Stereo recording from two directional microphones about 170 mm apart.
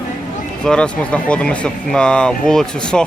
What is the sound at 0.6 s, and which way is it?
Speech, 5° left (ahead or behind).